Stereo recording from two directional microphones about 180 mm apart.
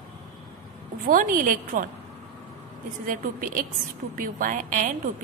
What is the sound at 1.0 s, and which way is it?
Speech, 50° right (ahead or behind).